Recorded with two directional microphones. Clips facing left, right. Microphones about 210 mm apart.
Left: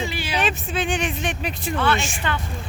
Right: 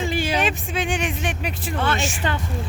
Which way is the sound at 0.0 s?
45° right (ahead or behind).